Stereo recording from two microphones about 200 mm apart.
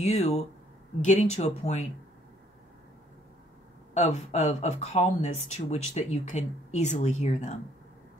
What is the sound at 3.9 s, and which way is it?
Speech, 35° left (ahead or behind).